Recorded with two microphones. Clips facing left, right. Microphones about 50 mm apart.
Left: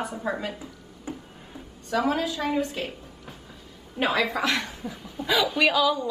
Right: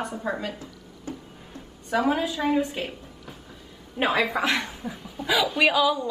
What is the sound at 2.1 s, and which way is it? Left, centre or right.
Speech, centre.